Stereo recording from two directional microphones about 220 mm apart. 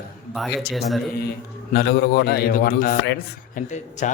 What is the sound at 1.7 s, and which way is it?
A man's voice, 45° left (ahead or behind).